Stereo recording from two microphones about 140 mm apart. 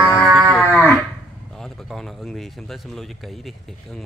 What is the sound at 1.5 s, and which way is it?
Speech, centre (ahead or behind).